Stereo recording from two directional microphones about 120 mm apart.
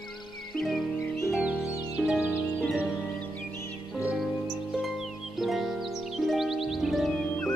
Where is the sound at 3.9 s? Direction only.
10° right (ahead or behind).